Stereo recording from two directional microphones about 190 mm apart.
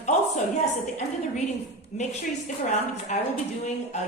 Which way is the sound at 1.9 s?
35° left (ahead or behind).